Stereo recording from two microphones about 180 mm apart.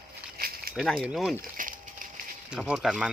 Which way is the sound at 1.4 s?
50° right (ahead or behind).